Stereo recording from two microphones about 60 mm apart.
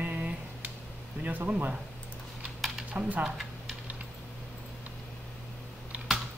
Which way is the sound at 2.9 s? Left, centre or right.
Right.